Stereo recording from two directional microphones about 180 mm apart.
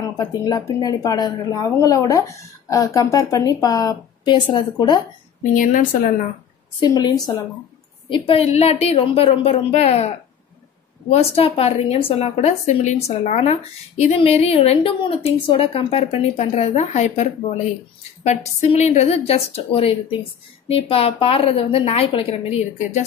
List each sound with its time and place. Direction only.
0.0 s speech: 20° left (ahead or behind)
5.4 s speech: 45° left (ahead or behind)
6.8 s a woman's voice: 25° left (ahead or behind)